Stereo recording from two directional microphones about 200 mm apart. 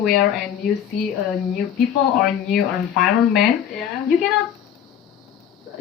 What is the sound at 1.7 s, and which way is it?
Speech, centre (ahead or behind).